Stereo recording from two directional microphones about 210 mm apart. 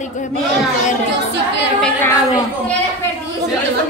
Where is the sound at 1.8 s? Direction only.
15° left (ahead or behind).